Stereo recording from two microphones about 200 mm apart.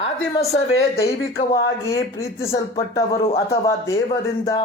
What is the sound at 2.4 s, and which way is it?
Speech, 15° left (ahead or behind).